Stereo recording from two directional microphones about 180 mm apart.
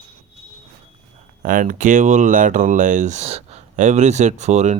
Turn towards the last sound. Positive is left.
turn(degrees=-40)  # may be behind; listen again after turning